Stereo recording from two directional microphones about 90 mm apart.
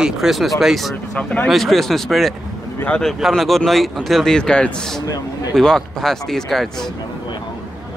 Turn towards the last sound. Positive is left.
turn(degrees=5)  # may be behind; listen again after turning